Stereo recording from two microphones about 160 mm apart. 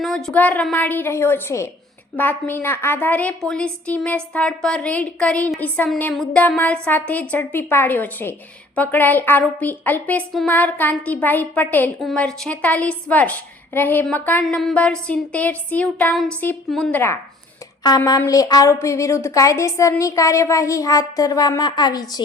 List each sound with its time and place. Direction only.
0.0 s a woman's voice: 5° left (ahead or behind)
17.8 s a woman's voice: 25° left (ahead or behind)